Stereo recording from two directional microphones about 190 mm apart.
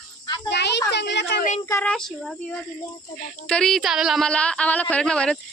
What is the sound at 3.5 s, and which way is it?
A woman's voice, 5° left (ahead or behind).